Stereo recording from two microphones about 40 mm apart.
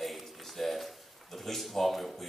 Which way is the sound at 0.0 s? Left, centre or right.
Centre.